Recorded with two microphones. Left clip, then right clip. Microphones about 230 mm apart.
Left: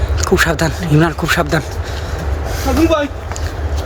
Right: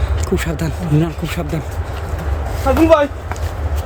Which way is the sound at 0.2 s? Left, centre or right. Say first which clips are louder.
Left 9 dB; centre.